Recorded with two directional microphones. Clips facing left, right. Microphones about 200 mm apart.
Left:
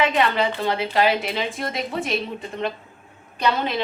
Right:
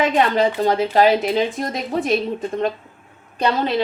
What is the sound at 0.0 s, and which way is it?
Speech, 45° right (ahead or behind).